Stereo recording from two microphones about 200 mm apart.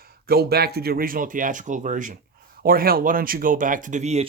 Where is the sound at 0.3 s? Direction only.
50° right (ahead or behind).